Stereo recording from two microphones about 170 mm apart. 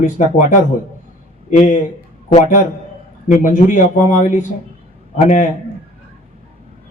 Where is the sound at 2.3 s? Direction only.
45° left (ahead or behind).